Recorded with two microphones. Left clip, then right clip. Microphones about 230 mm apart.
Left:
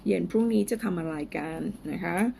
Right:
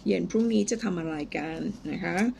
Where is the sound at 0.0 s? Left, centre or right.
Centre.